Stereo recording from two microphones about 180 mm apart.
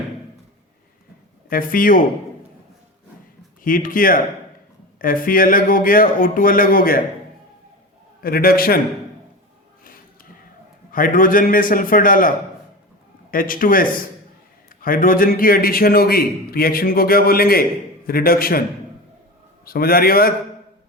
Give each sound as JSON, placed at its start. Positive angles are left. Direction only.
{"t": 1.5, "sound": "speech", "side_deg": 50}
{"t": 3.6, "sound": "speech", "side_deg": 50}
{"t": 8.2, "sound": "a man's voice", "side_deg": 55}
{"t": 10.9, "sound": "speech", "side_deg": 50}
{"t": 13.3, "sound": "a man's voice", "side_deg": 50}
{"t": 19.6, "sound": "a man's voice", "side_deg": 55}